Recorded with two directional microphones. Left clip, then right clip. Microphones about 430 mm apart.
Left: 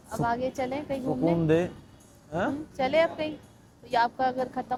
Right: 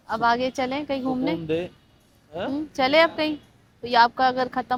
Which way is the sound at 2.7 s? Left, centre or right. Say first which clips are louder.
Right 7 dB; right.